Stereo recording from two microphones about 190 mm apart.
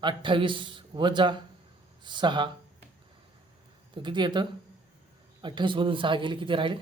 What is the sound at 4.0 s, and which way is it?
A man's voice, 25° right (ahead or behind).